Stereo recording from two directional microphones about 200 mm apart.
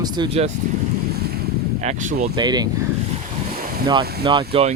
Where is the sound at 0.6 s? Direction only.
40° right (ahead or behind).